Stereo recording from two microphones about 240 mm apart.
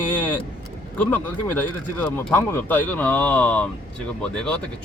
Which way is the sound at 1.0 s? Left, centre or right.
Centre.